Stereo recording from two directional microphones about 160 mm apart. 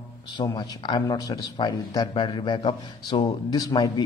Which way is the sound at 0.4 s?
25° left (ahead or behind).